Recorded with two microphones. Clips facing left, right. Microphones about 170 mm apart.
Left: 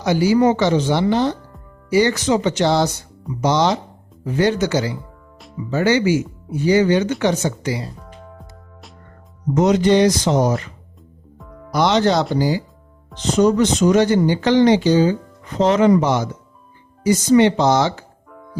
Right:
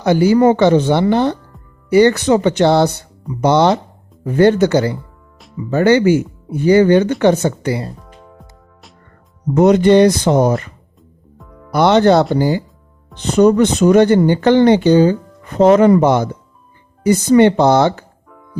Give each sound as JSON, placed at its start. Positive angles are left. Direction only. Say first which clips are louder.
{"t": 0.0, "sound": "speech", "louder": "right 4 dB", "side_deg": -55}
{"t": 9.6, "sound": "speech", "louder": "right 5 dB", "side_deg": -55}
{"t": 11.7, "sound": "speech", "louder": "right 6 dB", "side_deg": -55}